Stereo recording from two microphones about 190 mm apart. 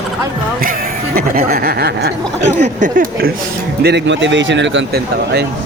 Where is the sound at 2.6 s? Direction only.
45° right (ahead or behind).